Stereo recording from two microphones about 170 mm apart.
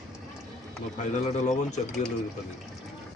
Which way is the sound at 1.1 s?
45° left (ahead or behind).